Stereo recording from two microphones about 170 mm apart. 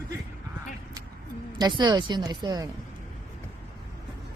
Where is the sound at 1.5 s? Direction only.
25° right (ahead or behind).